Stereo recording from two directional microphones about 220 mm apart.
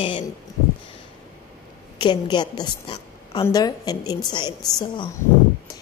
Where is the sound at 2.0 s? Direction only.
20° left (ahead or behind).